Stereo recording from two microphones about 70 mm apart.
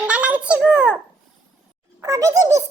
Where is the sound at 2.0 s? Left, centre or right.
Right.